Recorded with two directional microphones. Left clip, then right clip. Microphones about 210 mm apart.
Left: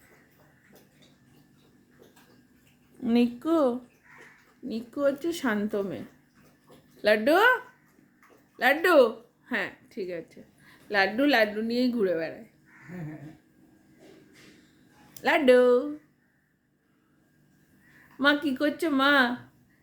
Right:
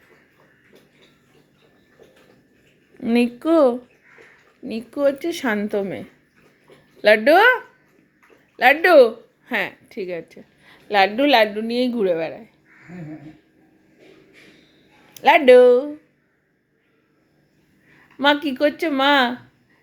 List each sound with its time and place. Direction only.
3.0 s a woman's voice: 20° right (ahead or behind)
7.0 s a woman's voice: 15° right (ahead or behind)
15.1 s a woman's voice: 15° right (ahead or behind)
18.2 s speech: 20° right (ahead or behind)